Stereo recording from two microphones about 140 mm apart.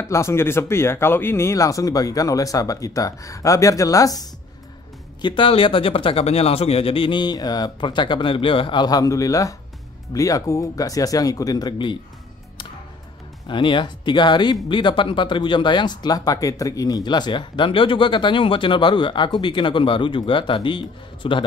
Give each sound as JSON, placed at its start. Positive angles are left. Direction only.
{"t": 0.0, "sound": "speech", "side_deg": 20}
{"t": 5.2, "sound": "speech", "side_deg": 35}
{"t": 13.5, "sound": "speech", "side_deg": 35}